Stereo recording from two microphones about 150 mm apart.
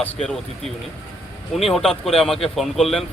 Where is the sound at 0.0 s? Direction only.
5° left (ahead or behind).